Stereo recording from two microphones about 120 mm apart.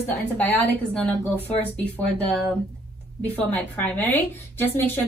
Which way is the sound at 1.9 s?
15° left (ahead or behind).